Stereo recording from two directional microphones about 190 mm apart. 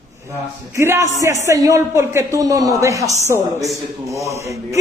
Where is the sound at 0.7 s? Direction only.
15° right (ahead or behind).